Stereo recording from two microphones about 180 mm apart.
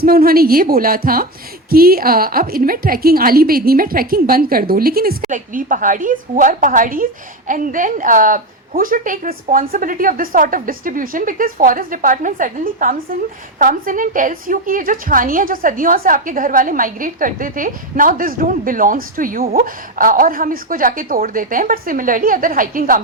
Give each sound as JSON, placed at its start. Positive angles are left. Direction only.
{"t": 0.0, "sound": "a woman's voice", "side_deg": -55}